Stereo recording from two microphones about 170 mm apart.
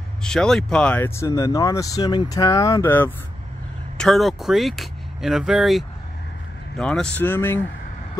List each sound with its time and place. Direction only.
0.2 s speech: 5° left (ahead or behind)
4.0 s speech: centre (ahead or behind)